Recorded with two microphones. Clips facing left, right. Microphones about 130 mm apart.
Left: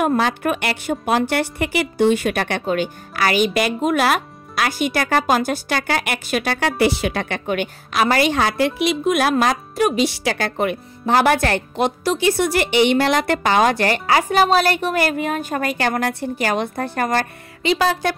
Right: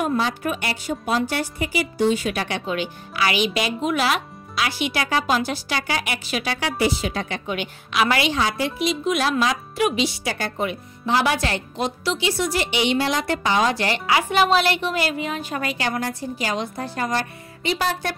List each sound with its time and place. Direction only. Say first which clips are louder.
0.0 s a woman's voice: left 4 dB; 65° left (ahead or behind); by 10.0 s 45° left (ahead or behind)
10.0 s speech: left 5 dB; 75° left (ahead or behind)